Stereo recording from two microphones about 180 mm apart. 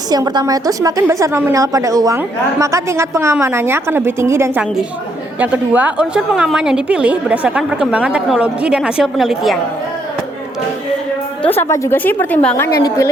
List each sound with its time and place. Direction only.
0.1 s a woman's voice: 20° right (ahead or behind); by 9.6 s centre (ahead or behind)
11.5 s a woman's voice: 15° left (ahead or behind)